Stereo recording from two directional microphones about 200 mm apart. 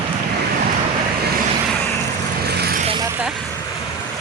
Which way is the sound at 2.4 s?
55° right (ahead or behind).